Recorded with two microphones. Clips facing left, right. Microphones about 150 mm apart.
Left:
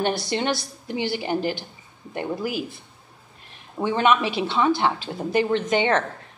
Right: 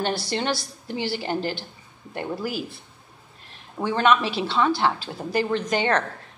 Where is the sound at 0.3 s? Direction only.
20° left (ahead or behind).